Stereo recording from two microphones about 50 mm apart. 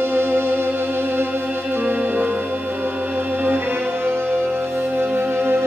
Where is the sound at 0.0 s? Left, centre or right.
Right.